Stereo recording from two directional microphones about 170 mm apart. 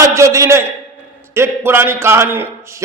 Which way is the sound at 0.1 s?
15° right (ahead or behind).